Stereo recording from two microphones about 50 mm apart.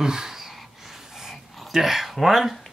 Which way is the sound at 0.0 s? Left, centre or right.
Centre.